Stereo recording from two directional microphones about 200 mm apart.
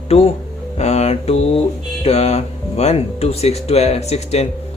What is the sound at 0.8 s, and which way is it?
Music, 30° left (ahead or behind).